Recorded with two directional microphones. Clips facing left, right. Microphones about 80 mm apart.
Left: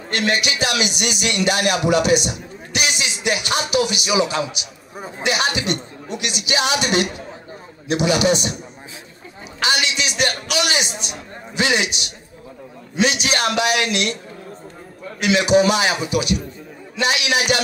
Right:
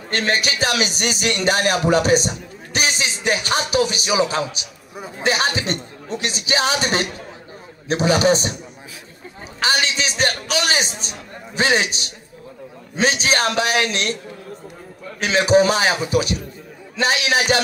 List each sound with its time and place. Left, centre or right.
0.1 s a man's voice: right
9.6 s a sound: right
12.9 s a man's voice: right
15.1 s a man's voice: right